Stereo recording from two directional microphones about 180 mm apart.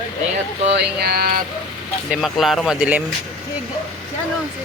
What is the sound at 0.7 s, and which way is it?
Speech, 65° right (ahead or behind).